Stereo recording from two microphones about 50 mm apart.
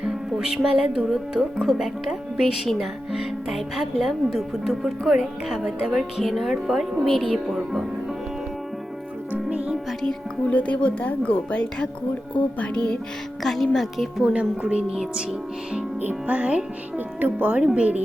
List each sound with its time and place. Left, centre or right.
0.1 s speech: centre
1.6 s speech: centre
9.5 s music: right
10.5 s speech: left
13.4 s speech: centre
14.3 s speech: right
16.0 s speech: right